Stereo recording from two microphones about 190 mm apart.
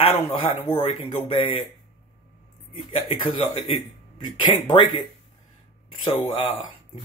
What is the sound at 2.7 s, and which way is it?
A man's voice, 30° left (ahead or behind).